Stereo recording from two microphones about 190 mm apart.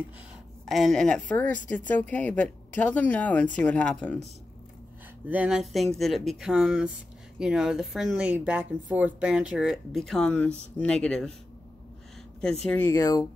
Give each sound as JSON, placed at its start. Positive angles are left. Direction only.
{"t": 0.7, "sound": "speech", "side_deg": 0}
{"t": 5.3, "sound": "speech", "side_deg": -5}
{"t": 12.6, "sound": "speech", "side_deg": 10}